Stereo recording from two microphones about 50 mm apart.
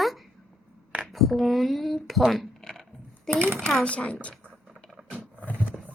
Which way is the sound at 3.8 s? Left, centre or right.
Left.